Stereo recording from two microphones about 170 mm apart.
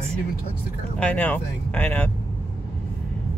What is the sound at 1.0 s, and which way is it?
Speech, 10° left (ahead or behind).